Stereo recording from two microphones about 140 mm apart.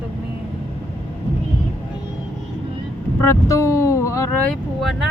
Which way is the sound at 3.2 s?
20° left (ahead or behind).